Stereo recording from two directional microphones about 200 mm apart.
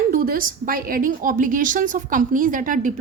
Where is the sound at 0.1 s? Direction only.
45° right (ahead or behind).